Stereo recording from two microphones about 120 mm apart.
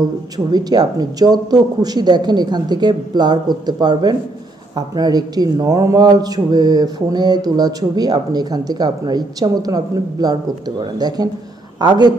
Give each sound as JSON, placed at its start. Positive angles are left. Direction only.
{"t": 0.5, "sound": "a man's voice", "side_deg": -35}